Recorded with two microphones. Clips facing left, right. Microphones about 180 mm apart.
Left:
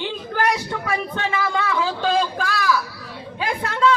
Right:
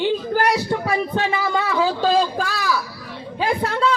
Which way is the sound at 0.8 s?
35° right (ahead or behind).